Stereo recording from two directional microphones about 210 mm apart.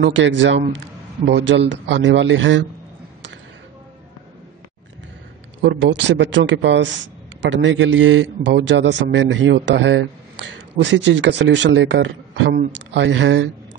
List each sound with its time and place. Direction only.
0.0 s a man's voice: 60° right (ahead or behind)
5.6 s a man's voice: 60° right (ahead or behind)